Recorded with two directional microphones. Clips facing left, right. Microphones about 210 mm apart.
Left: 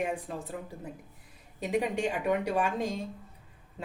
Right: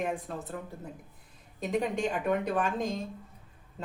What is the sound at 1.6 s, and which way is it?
A woman's voice, 10° left (ahead or behind).